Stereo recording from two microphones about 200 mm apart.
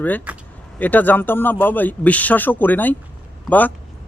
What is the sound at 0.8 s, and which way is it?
Speech, 10° left (ahead or behind).